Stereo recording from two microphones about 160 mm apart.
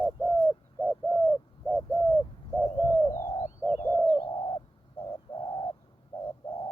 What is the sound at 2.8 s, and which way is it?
Bird, 15° left (ahead or behind).